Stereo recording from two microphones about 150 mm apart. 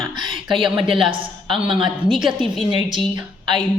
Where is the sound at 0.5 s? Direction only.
35° right (ahead or behind).